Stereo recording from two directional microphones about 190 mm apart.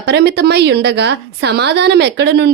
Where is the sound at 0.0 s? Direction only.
60° right (ahead or behind).